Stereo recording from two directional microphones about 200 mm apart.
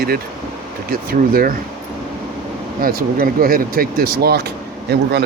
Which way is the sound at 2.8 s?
45° right (ahead or behind).